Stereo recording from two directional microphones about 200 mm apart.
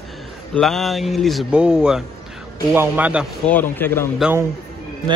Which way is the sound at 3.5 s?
10° left (ahead or behind).